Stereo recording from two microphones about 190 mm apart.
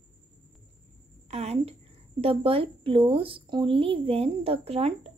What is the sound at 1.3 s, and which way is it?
A woman's voice, 35° right (ahead or behind).